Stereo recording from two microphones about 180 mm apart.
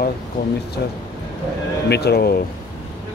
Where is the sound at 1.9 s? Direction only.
65° left (ahead or behind).